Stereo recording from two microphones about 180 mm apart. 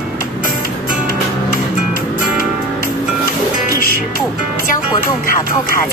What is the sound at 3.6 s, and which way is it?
Music, 50° left (ahead or behind).